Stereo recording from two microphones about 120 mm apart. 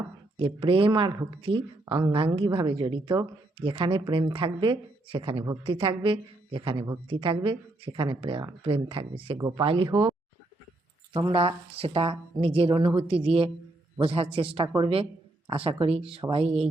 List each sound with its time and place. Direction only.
0.3 s speech: 45° right (ahead or behind)
11.3 s speech: 50° right (ahead or behind)